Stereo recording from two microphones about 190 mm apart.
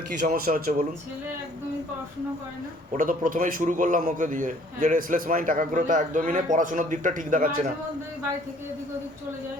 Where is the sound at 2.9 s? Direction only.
45° right (ahead or behind).